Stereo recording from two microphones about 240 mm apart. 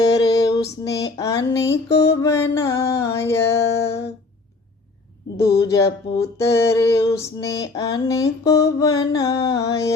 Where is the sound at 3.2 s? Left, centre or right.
Centre.